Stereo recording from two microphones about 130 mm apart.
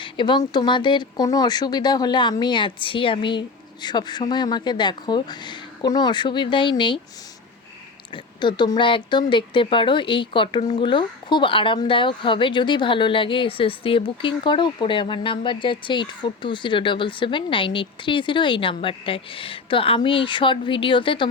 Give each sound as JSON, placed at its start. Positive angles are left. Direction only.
{"t": 0.0, "sound": "a woman's voice", "side_deg": 35}
{"t": 8.1, "sound": "a woman's voice", "side_deg": 35}